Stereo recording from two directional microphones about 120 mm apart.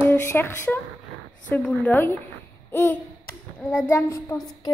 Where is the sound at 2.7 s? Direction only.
20° left (ahead or behind).